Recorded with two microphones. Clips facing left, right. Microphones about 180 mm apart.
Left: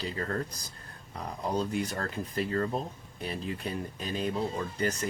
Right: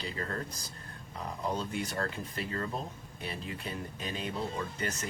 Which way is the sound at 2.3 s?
40° left (ahead or behind).